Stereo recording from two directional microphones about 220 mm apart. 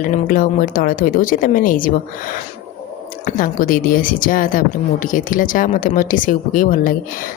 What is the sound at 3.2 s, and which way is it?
A woman's voice, 40° left (ahead or behind).